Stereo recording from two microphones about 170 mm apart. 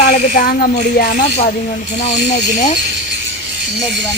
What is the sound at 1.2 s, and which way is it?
Speech, 40° left (ahead or behind).